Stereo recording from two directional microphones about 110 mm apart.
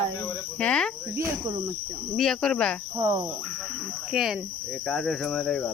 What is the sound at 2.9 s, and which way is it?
Speech, 25° right (ahead or behind).